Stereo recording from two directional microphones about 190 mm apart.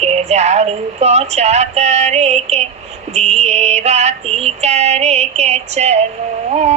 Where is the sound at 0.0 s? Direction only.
35° right (ahead or behind).